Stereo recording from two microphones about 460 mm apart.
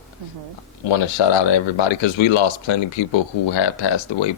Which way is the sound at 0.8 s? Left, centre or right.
Left.